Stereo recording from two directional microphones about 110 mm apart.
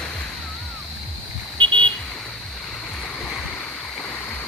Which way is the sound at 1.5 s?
50° right (ahead or behind).